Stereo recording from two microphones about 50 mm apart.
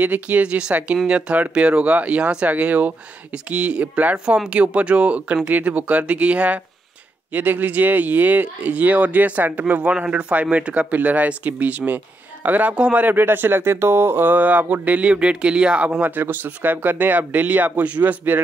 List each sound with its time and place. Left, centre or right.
0.0 s speech: right
12.7 s speech: right
13.0 s speech: right; by 15.9 s centre
16.0 s speech: right